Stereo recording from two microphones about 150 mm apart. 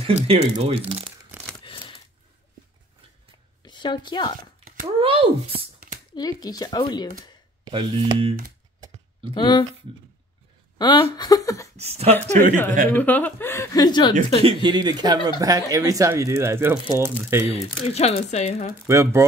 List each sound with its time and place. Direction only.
0.0 s speech: 45° right (ahead or behind)
1.6 s a sound: 35° left (ahead or behind)
3.6 s a woman's voice: 30° left (ahead or behind)
4.8 s speech: 35° right (ahead or behind)
6.1 s speech: 25° left (ahead or behind)
7.6 s speech: 35° right (ahead or behind)
9.3 s speech: 30° left (ahead or behind)
10.8 s speech: 30° left (ahead or behind)
11.7 s speech: 45° right (ahead or behind)
12.9 s speech: 10° left (ahead or behind); by 14.1 s 30° left (ahead or behind)
14.4 s speech: 35° right (ahead or behind); by 17.5 s 15° right (ahead or behind)
17.5 s speech: 45° left (ahead or behind)
18.9 s speech: 20° right (ahead or behind)